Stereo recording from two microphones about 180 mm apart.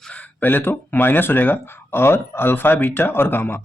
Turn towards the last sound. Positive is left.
turn(degrees=10)  # may be behind; listen again after turning